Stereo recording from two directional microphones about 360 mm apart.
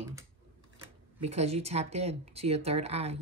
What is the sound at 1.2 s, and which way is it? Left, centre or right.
Speech, centre.